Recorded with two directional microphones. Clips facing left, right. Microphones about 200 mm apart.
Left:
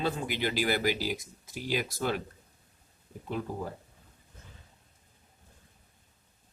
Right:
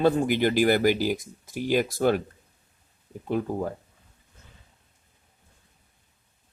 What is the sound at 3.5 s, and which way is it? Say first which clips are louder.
Speech: right 7 dB; 50° right (ahead or behind).